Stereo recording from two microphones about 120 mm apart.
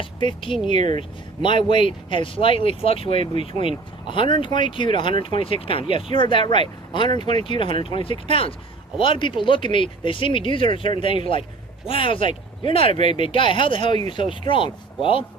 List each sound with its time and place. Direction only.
0.0 s speech: 45° left (ahead or behind)